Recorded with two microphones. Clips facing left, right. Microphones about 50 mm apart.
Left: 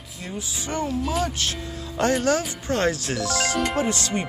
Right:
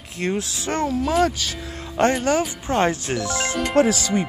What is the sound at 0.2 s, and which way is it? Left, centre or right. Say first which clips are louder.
Speech: right 8 dB; right.